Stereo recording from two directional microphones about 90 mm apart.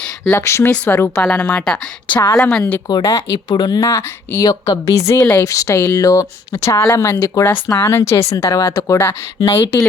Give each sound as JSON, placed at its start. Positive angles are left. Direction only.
{"t": 0.3, "sound": "speech", "side_deg": 30}
{"t": 2.0, "sound": "a woman's voice", "side_deg": 50}
{"t": 2.4, "sound": "speech", "side_deg": 5}
{"t": 2.8, "sound": "speech", "side_deg": 40}
{"t": 3.3, "sound": "speech", "side_deg": 50}
{"t": 3.8, "sound": "speech", "side_deg": 35}
{"t": 4.4, "sound": "speech", "side_deg": 40}